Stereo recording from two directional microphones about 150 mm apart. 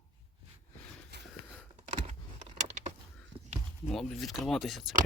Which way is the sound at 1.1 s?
90° right.